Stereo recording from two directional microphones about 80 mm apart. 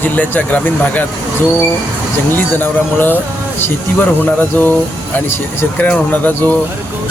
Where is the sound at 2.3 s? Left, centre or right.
Left.